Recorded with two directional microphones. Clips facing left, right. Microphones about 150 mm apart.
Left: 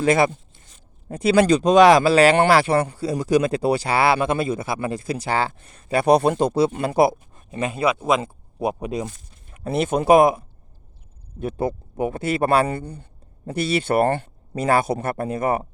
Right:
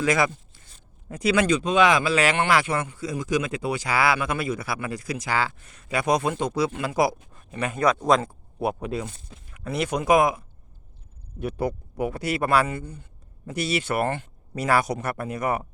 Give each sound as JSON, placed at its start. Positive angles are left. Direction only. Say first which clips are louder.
{"t": 0.0, "sound": "speech", "louder": "left 5 dB", "side_deg": 30}
{"t": 9.5, "sound": "a sound", "louder": "left 5 dB", "side_deg": 25}
{"t": 10.0, "sound": "speech", "louder": "left 5 dB", "side_deg": 30}
{"t": 11.4, "sound": "speech", "louder": "left 3 dB", "side_deg": 25}